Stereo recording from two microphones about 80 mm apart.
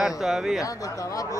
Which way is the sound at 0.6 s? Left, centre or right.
Left.